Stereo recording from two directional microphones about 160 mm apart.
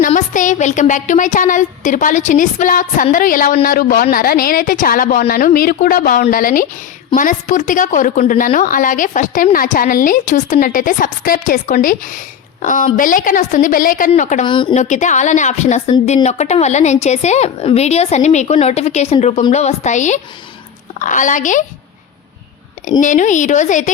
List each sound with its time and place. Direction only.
0.0 s a woman's voice: 55° left (ahead or behind)
14.4 s speech: 30° left (ahead or behind)
14.7 s a woman's voice: 50° left (ahead or behind)
22.9 s a woman's voice: 50° left (ahead or behind)